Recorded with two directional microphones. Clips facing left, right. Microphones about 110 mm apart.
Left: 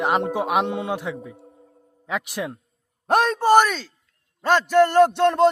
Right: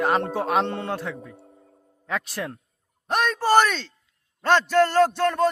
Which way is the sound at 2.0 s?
15° left (ahead or behind).